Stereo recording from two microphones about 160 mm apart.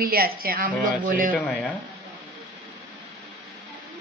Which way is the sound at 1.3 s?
10° left (ahead or behind).